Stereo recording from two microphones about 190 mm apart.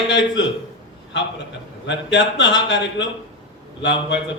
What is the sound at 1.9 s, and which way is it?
Speech, 70° left (ahead or behind).